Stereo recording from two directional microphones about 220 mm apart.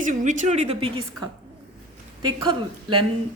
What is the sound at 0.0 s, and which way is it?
Speech, 35° right (ahead or behind).